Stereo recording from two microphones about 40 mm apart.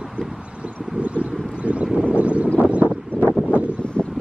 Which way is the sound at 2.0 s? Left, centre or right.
Right.